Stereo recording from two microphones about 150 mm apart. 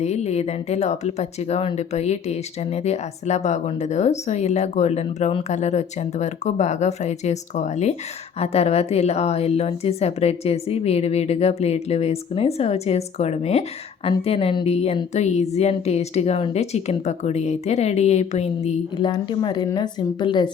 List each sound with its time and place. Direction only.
0.0 s speech: 50° left (ahead or behind)
19.0 s speech: 30° left (ahead or behind)